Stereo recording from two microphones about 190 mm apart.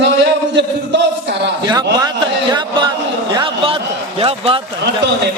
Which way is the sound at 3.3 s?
30° right (ahead or behind).